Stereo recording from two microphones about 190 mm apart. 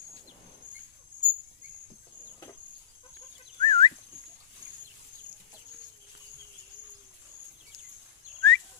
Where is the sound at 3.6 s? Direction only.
25° left (ahead or behind).